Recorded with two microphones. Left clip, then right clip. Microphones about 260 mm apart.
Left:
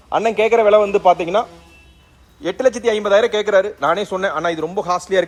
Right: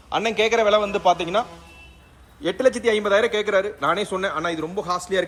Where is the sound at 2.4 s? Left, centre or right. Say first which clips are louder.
Left 3 dB; centre.